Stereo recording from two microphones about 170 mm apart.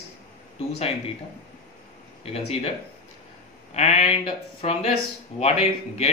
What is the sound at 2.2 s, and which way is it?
Speech, 35° left (ahead or behind).